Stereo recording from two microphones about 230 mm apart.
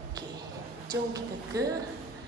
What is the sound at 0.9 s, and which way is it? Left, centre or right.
Speech, centre.